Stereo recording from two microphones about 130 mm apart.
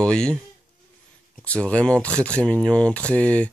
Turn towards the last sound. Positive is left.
turn(degrees=10)  # may be behind; listen again after turning